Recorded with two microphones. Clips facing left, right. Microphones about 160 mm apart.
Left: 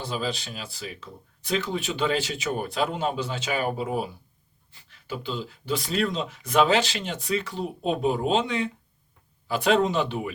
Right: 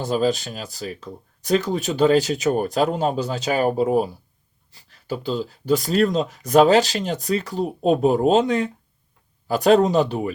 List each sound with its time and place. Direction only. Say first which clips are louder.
0.0 s speech: right 9 dB; 45° right (ahead or behind)